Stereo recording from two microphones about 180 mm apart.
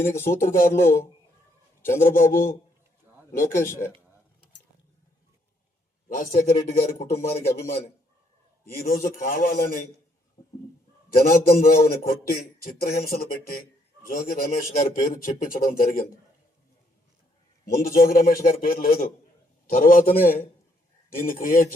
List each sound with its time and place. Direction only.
0.3 s a man's voice: 50° left (ahead or behind)
0.7 s a man's voice: 15° left (ahead or behind)
2.0 s a man's voice: 50° left (ahead or behind)
3.5 s a man's voice: 15° left (ahead or behind)
6.1 s a man's voice: 50° left (ahead or behind)
11.1 s a man's voice: 55° left (ahead or behind)
17.8 s a man's voice: 55° left (ahead or behind)